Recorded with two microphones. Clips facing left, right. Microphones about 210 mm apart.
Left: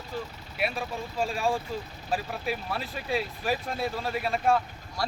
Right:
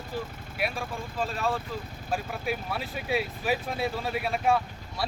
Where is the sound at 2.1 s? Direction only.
Centre (ahead or behind).